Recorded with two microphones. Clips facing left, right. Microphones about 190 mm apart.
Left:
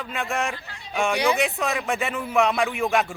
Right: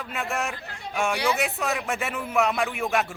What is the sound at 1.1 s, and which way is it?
Speech, 15° left (ahead or behind).